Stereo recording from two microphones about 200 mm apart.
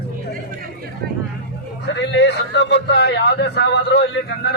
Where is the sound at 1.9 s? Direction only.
60° left (ahead or behind).